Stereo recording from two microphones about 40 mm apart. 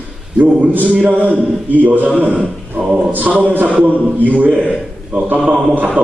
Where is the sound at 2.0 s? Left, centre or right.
Right.